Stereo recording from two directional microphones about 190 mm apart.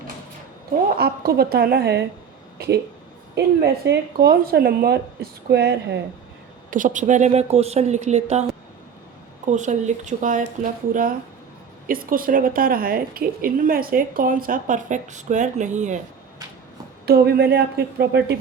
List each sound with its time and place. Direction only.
0.9 s speech: 55° right (ahead or behind)
6.7 s speech: 45° right (ahead or behind)
9.5 s a woman's voice: 40° right (ahead or behind)
17.1 s speech: 60° right (ahead or behind)